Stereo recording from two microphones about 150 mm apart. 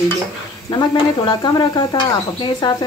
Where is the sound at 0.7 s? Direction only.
30° left (ahead or behind).